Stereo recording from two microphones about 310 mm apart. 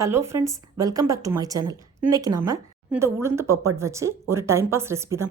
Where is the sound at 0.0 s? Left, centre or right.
Centre.